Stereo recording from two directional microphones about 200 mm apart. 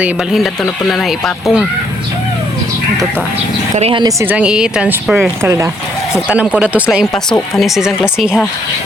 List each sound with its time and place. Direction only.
0.9 s speech: centre (ahead or behind)
3.8 s speech: 25° right (ahead or behind)
4.3 s speech: 5° right (ahead or behind)